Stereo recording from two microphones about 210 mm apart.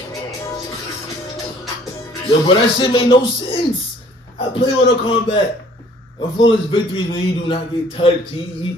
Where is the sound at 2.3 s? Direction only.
25° left (ahead or behind).